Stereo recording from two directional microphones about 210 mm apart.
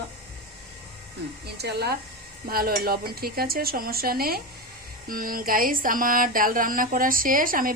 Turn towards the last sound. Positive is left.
turn(degrees=-40)  # may be behind; listen again after turning